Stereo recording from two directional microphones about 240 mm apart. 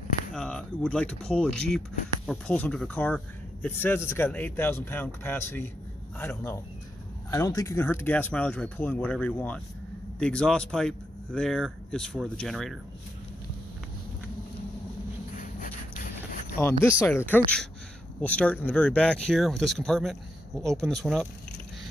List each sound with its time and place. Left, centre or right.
0.3 s speech: centre
15.3 s a sound: left
16.6 s speech: centre